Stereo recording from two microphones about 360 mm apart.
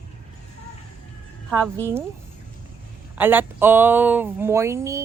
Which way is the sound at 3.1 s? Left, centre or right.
Centre.